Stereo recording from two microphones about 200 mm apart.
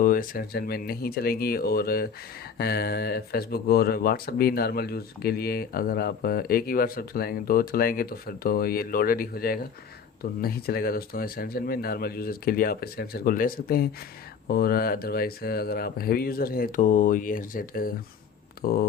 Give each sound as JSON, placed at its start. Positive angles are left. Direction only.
{"t": 0.0, "sound": "speech", "side_deg": 45}